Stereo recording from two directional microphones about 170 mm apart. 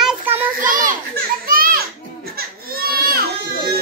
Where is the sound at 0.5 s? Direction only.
55° right (ahead or behind).